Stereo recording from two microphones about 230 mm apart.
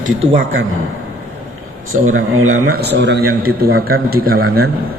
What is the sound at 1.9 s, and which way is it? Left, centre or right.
Speech, right.